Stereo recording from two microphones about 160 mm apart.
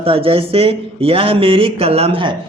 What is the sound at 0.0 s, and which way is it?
Speech, 35° right (ahead or behind).